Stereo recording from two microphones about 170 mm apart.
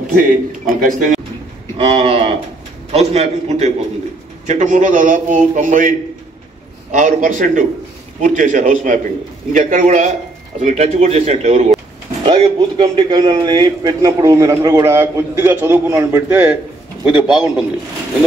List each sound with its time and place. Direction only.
0.2 s a man's voice: 55° right (ahead or behind)
1.8 s a sound: 35° right (ahead or behind)
2.9 s a man's voice: 40° right (ahead or behind)
12.3 s a man's voice: 25° right (ahead or behind); by 17.6 s 5° right (ahead or behind)